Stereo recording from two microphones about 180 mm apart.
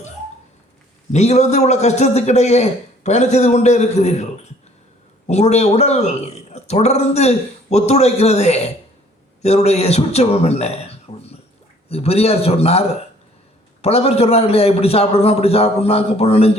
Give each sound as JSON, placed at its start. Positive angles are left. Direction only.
{"t": 1.1, "sound": "a man's voice", "side_deg": 40}
{"t": 5.3, "sound": "a man's voice", "side_deg": 35}
{"t": 13.8, "sound": "a man's voice", "side_deg": 35}